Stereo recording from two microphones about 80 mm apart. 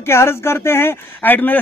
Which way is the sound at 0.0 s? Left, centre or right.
Left.